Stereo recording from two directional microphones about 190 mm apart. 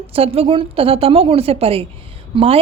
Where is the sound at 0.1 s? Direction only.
30° right (ahead or behind).